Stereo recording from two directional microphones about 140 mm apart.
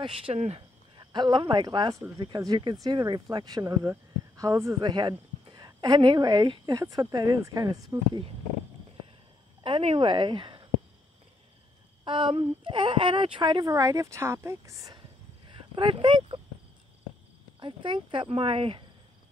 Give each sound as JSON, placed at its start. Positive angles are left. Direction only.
{"t": 0.0, "sound": "speech", "side_deg": -40}
{"t": 0.9, "sound": "a woman's voice", "side_deg": -30}
{"t": 9.6, "sound": "a woman's voice", "side_deg": -40}
{"t": 12.0, "sound": "a woman's voice", "side_deg": -35}
{"t": 15.7, "sound": "speech", "side_deg": -35}
{"t": 17.6, "sound": "speech", "side_deg": -35}